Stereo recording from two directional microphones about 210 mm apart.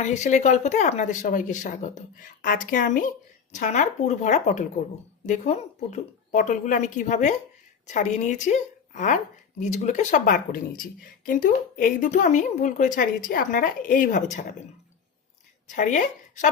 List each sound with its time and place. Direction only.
0.0 s a woman's voice: 35° left (ahead or behind)
15.7 s a woman's voice: 35° left (ahead or behind)